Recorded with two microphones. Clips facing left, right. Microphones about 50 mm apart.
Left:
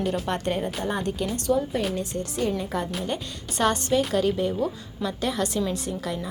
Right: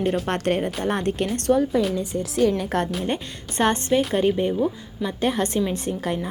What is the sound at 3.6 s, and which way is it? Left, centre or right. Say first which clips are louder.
Speech: right 2 dB; right.